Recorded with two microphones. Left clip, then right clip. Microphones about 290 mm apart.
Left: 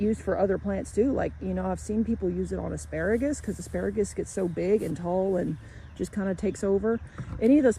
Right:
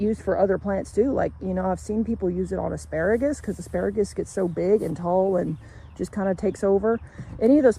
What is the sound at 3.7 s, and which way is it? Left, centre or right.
Speech, right.